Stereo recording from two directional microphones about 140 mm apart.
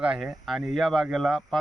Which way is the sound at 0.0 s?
5° right (ahead or behind).